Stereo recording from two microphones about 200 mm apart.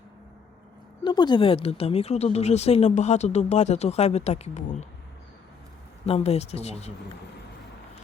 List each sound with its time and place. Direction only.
1.0 s speech: 20° left (ahead or behind)
6.1 s speech: 30° left (ahead or behind)